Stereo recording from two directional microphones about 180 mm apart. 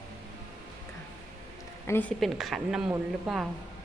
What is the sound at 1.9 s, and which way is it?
Speech, 10° left (ahead or behind).